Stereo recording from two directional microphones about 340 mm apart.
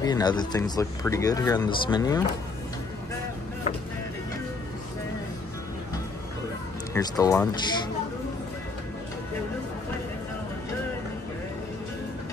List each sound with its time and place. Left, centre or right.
0.0 s speech: centre
6.9 s speech: centre